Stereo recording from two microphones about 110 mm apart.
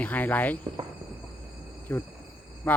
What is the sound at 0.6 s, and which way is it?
Speech, 45° right (ahead or behind).